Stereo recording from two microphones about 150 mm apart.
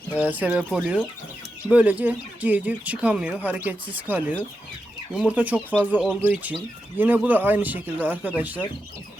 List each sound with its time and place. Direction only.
0.1 s speech: 10° right (ahead or behind)